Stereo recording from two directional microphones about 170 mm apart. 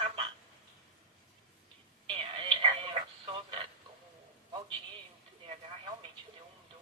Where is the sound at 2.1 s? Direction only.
30° right (ahead or behind).